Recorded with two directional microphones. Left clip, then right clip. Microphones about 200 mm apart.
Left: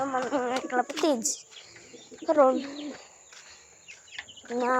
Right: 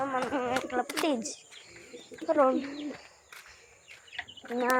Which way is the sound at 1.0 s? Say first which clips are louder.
Left 4 dB; 30° left (ahead or behind).